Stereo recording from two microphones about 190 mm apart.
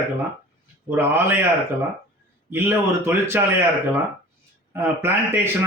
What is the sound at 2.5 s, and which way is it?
Speech, 10° right (ahead or behind).